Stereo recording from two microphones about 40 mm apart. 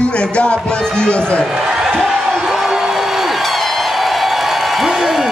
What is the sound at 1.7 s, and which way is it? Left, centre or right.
Crowd, centre.